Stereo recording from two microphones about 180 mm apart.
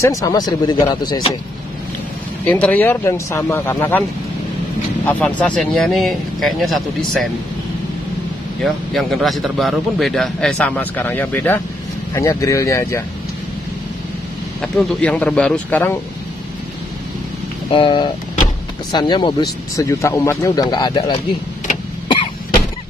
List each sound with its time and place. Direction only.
0.1 s speech: 20° left (ahead or behind)
2.4 s speech: 10° left (ahead or behind)
5.2 s a man's voice: 5° left (ahead or behind)
8.6 s a man's voice: centre (ahead or behind); by 13.0 s 15° left (ahead or behind)
14.6 s a man's voice: centre (ahead or behind)
17.6 s speech: 30° left (ahead or behind)
22.0 s throat clearing: 30° left (ahead or behind)